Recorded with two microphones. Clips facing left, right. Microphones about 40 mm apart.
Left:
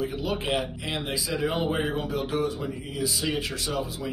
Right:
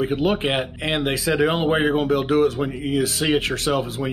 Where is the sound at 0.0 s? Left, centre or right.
Right.